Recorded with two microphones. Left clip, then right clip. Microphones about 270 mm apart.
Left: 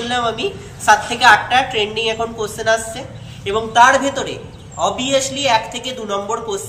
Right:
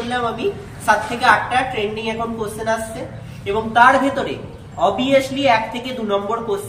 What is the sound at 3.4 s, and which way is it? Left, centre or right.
A man's voice, centre.